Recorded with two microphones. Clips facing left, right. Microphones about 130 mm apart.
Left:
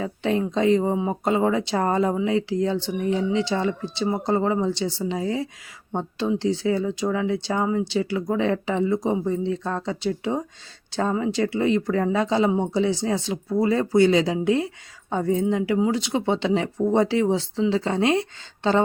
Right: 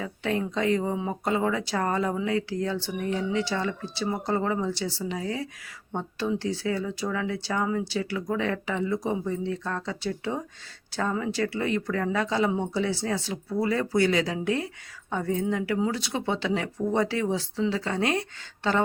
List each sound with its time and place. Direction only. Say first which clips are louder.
0.0 s speech: left 5 dB; 25° left (ahead or behind)